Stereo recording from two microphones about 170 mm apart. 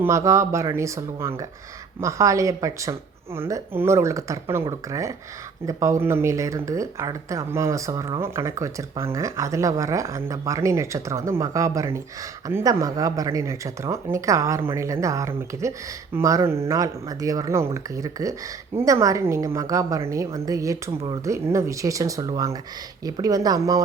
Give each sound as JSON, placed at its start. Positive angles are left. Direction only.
{"t": 0.0, "sound": "speech", "side_deg": -15}